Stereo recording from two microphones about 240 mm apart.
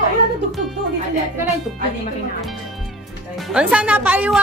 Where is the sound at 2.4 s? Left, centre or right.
Centre.